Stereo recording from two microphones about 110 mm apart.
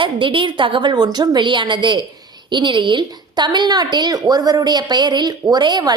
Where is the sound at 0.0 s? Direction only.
50° right (ahead or behind).